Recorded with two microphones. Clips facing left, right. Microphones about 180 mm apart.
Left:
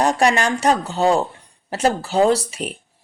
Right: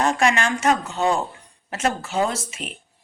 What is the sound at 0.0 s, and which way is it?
Speech, 35° left (ahead or behind).